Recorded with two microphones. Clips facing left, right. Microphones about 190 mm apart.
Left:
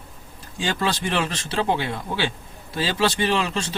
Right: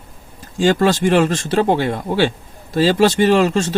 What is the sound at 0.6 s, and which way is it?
Speech, 45° right (ahead or behind).